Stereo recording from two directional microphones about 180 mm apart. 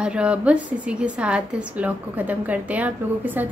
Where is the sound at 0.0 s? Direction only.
5° right (ahead or behind).